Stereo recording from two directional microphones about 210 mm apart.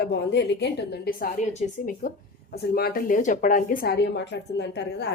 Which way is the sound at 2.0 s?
40° left (ahead or behind).